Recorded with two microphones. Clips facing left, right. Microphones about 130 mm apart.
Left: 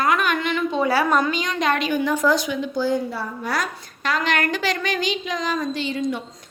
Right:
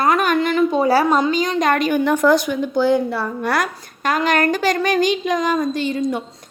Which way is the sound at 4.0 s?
45° right (ahead or behind).